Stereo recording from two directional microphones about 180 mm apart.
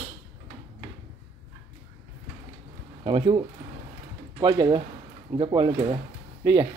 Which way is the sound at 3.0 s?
30° right (ahead or behind).